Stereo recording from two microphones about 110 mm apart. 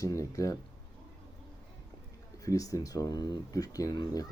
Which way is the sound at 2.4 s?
30° left (ahead or behind).